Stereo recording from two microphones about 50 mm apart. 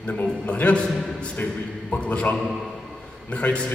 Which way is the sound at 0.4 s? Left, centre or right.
Left.